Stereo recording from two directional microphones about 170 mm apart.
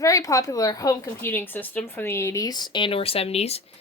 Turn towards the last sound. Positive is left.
turn(degrees=35)  # may be behind; listen again after turning